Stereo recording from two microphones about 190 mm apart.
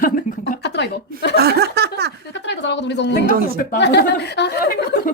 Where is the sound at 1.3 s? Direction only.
55° right (ahead or behind).